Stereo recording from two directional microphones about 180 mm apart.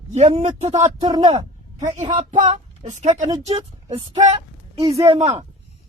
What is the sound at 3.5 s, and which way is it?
A woman's voice, 20° right (ahead or behind).